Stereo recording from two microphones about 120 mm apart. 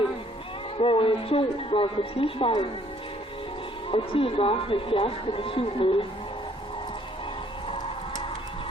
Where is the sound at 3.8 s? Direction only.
50° left (ahead or behind).